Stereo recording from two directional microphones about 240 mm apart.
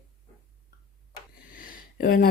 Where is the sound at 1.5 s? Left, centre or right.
Left.